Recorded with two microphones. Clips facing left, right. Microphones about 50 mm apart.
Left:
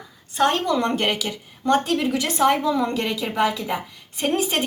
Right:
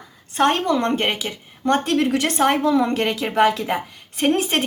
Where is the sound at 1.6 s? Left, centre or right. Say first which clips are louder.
Right 1 dB; right.